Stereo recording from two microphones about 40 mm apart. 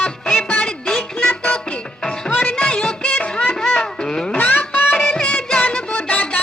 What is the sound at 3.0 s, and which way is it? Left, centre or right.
Music, left.